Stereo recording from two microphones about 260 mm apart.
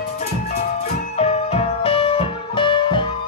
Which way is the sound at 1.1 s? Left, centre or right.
Left.